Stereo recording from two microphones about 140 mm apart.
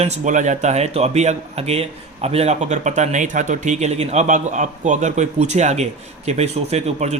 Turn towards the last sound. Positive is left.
turn(degrees=-50)  # may be behind; listen again after turning